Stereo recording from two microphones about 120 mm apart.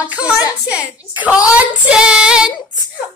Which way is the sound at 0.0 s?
10° right (ahead or behind).